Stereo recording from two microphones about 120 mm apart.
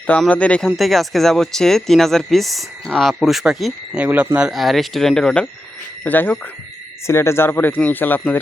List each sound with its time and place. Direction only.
0.1 s speech: 10° left (ahead or behind)
4.0 s speech: 10° right (ahead or behind); by 8.4 s 15° left (ahead or behind)